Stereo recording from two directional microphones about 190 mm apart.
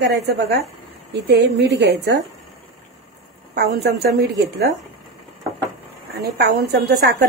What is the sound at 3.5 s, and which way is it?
Speech, 55° right (ahead or behind).